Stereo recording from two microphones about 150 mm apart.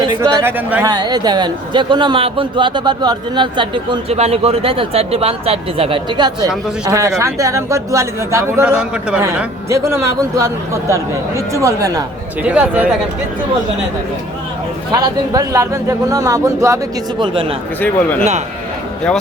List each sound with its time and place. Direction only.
0.1 s speech: 20° right (ahead or behind)
0.9 s a man's voice: 25° right (ahead or behind)
8.6 s a man's voice: 5° right (ahead or behind)
9.6 s a man's voice: 20° right (ahead or behind)
12.4 s speech: 10° right (ahead or behind)
15.3 s a man's voice: 20° right (ahead or behind)
17.7 s speech: 10° left (ahead or behind)